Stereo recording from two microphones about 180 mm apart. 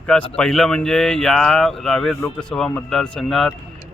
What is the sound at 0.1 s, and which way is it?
Speech, 5° left (ahead or behind).